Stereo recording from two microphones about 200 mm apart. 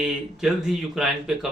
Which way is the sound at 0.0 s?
Centre (ahead or behind).